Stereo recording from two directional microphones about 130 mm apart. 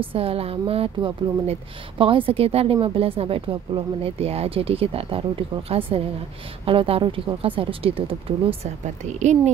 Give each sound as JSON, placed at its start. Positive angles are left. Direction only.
{"t": 0.0, "sound": "speech", "side_deg": -45}